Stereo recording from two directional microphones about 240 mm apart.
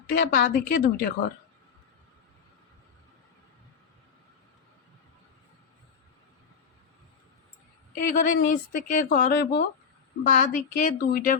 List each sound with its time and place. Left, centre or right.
0.2 s speech: left
7.9 s speech: left